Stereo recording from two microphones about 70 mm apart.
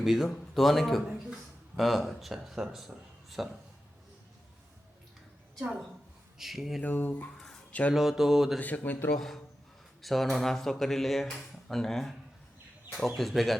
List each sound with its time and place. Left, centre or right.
0.0 s speech: centre
6.4 s speech: centre
6.8 s speech: left
7.9 s speech: centre
8.5 s speech: left
10.0 s speech: centre
13.1 s speech: centre